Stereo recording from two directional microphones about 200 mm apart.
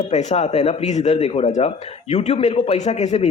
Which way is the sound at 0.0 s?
35° left (ahead or behind).